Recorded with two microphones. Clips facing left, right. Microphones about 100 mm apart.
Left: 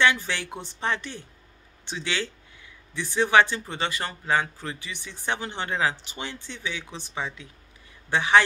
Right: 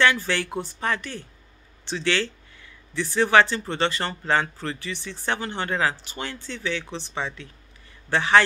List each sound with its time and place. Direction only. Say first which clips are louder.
0.0 s speech: right 2 dB; 15° left (ahead or behind)